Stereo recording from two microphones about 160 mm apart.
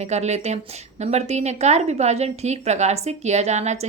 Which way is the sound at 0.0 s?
45° right (ahead or behind).